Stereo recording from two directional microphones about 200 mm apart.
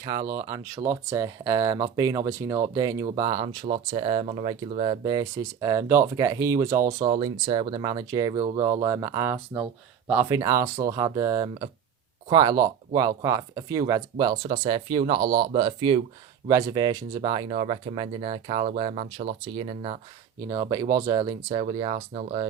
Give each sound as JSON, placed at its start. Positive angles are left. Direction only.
{"t": 0.0, "sound": "speech", "side_deg": -20}